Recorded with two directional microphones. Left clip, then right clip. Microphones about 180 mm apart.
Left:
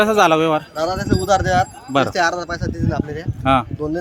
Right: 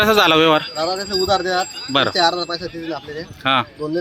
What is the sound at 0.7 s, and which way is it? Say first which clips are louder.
A man's voice: even; 35° left (ahead or behind).